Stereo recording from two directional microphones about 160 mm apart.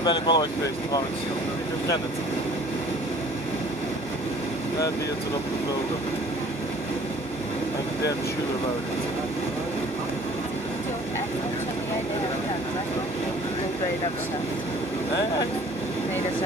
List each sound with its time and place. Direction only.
0.0 s speech: 30° left (ahead or behind)